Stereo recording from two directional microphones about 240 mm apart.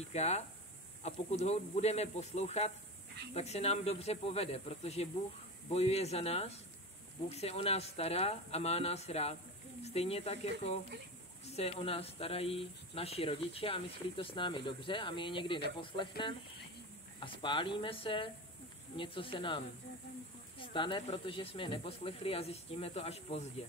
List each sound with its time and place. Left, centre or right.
0.1 s speech: left